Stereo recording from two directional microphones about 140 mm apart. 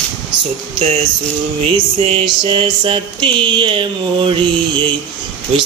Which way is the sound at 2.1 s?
35° right (ahead or behind).